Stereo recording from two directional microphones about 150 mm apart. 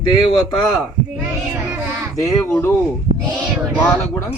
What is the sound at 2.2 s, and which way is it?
Speech, 15° left (ahead or behind).